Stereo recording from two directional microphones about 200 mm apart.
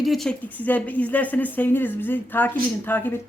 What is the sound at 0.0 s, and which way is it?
Speech, centre (ahead or behind).